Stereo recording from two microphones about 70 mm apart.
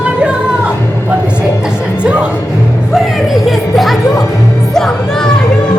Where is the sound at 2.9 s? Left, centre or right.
Centre.